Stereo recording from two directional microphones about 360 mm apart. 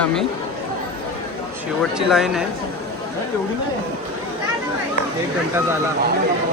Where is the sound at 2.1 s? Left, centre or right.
Centre.